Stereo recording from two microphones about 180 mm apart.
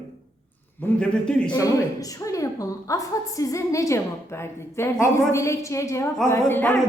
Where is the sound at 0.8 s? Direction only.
5° left (ahead or behind).